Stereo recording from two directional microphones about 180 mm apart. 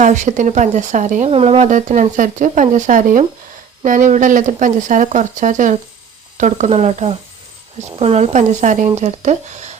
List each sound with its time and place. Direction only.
0.0 s a woman's voice: 45° right (ahead or behind)